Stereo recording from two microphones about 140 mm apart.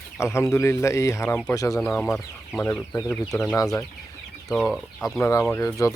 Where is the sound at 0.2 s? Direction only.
20° left (ahead or behind).